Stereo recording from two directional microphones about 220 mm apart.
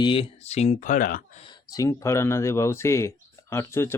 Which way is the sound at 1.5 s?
20° left (ahead or behind).